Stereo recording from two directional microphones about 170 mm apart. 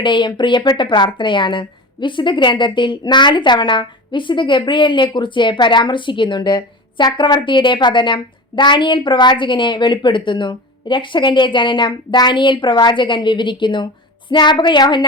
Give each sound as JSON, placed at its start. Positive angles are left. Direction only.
{"t": 0.0, "sound": "a woman's voice", "side_deg": 30}